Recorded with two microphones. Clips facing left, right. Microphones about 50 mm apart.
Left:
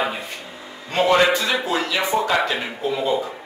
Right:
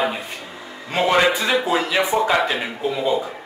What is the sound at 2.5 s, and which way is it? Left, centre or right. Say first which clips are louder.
Speech: right 1 dB; centre.